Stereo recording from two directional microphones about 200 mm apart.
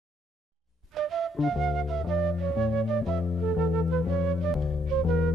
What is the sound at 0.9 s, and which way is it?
Flute, centre (ahead or behind).